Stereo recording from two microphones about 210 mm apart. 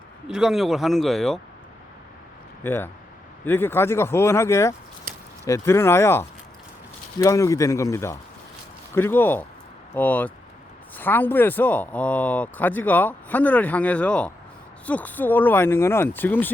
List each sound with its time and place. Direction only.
0.3 s speech: 5° right (ahead or behind)
2.6 s speech: 10° left (ahead or behind)
5.1 s a sound: 40° right (ahead or behind)
5.5 s speech: 15° left (ahead or behind)